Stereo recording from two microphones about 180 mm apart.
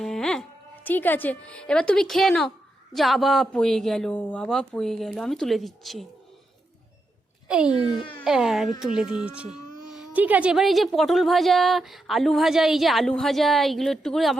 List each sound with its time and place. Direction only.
0.0 s music: centre (ahead or behind)
0.9 s speech: 10° left (ahead or behind)
7.4 s a child's voice: 5° right (ahead or behind)